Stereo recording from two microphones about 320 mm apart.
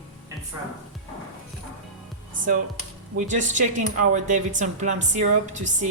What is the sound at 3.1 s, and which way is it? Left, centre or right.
Speech, right.